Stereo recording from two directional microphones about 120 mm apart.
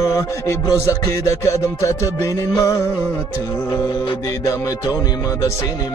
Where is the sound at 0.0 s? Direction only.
25° left (ahead or behind).